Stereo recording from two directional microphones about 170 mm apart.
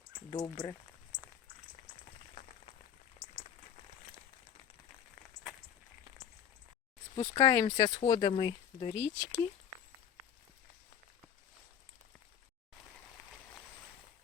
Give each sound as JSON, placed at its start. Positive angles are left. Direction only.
{"t": 0.3, "sound": "speech", "side_deg": 20}
{"t": 7.2, "sound": "speech", "side_deg": 20}